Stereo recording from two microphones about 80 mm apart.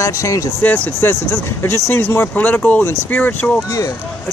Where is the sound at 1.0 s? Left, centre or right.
Left.